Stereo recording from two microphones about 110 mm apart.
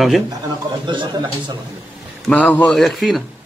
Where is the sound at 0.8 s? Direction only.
45° right (ahead or behind).